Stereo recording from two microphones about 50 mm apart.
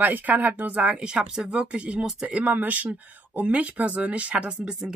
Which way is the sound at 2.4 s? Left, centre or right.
Right.